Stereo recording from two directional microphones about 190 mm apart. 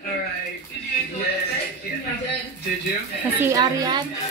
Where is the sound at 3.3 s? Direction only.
15° right (ahead or behind).